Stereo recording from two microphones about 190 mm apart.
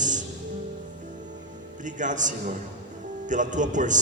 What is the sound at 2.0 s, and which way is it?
A man's voice, 40° right (ahead or behind).